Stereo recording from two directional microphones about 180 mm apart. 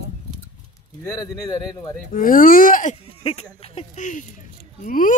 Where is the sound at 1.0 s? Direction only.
20° left (ahead or behind).